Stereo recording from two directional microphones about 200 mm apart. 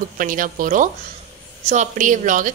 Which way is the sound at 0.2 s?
40° right (ahead or behind).